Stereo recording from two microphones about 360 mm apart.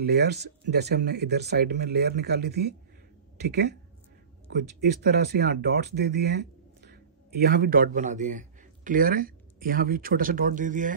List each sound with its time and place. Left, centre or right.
0.0 s speech: right